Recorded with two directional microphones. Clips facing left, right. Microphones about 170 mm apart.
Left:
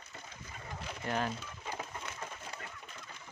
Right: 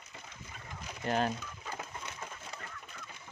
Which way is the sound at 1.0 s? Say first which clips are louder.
Right 4 dB; 30° right (ahead or behind).